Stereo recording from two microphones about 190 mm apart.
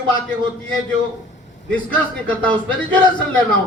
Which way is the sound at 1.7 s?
5° left (ahead or behind).